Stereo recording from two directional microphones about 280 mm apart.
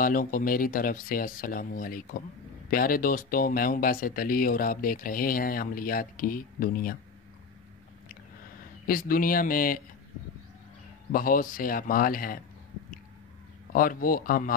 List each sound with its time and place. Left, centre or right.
0.0 s speech: left
8.8 s speech: left
11.1 s speech: left
13.7 s speech: left